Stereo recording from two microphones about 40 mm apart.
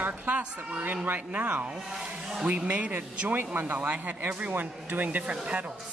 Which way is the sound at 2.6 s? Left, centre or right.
Right.